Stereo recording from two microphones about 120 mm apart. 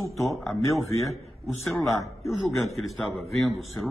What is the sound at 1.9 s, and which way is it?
Speech, 25° left (ahead or behind).